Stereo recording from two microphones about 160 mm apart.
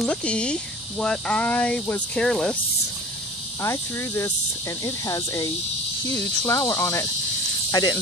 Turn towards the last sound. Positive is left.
turn(degrees=25)  # may be behind; listen again after turning